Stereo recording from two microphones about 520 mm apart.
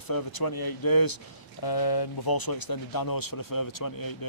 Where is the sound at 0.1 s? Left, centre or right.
Left.